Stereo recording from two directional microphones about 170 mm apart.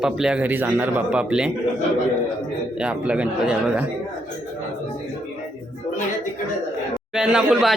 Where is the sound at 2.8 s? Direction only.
5° right (ahead or behind).